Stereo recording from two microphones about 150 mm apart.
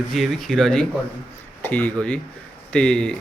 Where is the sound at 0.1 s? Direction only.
Centre (ahead or behind).